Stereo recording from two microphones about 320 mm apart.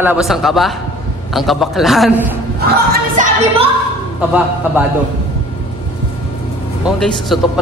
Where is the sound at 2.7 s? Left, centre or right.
Right.